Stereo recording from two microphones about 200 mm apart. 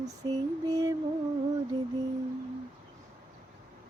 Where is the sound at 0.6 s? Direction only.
15° right (ahead or behind).